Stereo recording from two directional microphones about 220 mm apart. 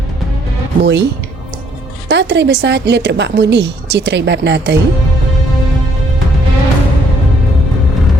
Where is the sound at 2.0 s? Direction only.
55° right (ahead or behind).